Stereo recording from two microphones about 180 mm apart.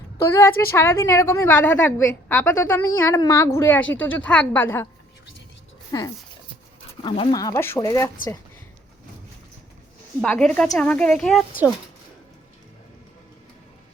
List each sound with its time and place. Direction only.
0.2 s a woman's voice: 15° left (ahead or behind)
5.9 s speech: 20° left (ahead or behind)
10.2 s a child's voice: 5° left (ahead or behind)